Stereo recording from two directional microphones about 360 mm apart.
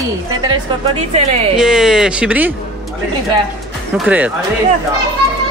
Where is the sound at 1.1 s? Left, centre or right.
Centre.